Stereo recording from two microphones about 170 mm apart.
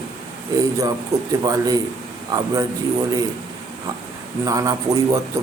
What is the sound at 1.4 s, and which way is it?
Speech, 20° right (ahead or behind).